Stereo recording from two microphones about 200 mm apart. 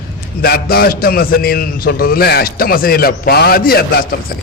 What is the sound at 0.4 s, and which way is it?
A man's voice, 50° left (ahead or behind).